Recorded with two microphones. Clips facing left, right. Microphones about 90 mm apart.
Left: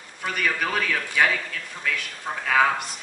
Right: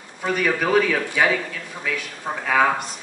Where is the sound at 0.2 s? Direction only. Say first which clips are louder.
Right 4 dB; 10° right (ahead or behind).